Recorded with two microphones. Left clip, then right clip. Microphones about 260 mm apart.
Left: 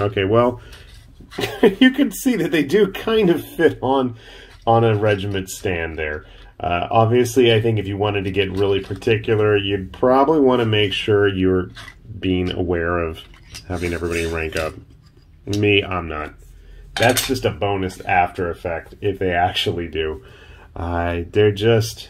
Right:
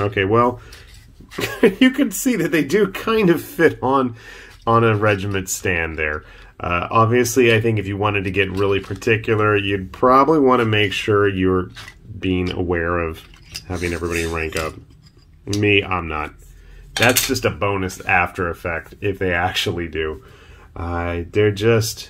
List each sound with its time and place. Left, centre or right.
0.0 s speech: centre